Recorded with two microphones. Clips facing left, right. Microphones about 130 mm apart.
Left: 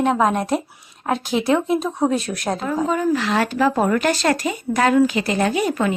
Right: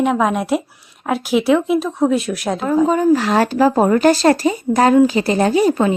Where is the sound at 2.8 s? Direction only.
35° right (ahead or behind).